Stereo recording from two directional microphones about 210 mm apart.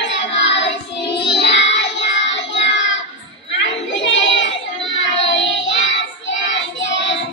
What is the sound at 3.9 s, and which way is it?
Hands, 60° left (ahead or behind).